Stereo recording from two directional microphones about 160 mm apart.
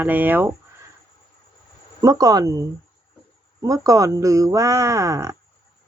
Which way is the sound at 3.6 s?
20° right (ahead or behind).